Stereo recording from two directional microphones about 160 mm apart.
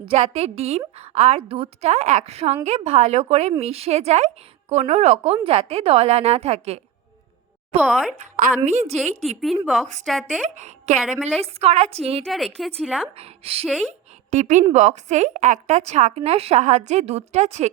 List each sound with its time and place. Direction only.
0.0 s a woman's voice: 35° right (ahead or behind)
7.8 s speech: 5° right (ahead or behind)
8.2 s a woman's voice: 50° right (ahead or behind)
9.4 s speech: centre (ahead or behind)
9.8 s a woman's voice: 50° right (ahead or behind)
10.1 s speech: 5° left (ahead or behind)
10.4 s a woman's voice: 50° right (ahead or behind)
12.2 s speech: centre (ahead or behind)
13.1 s a woman's voice: 40° right (ahead or behind)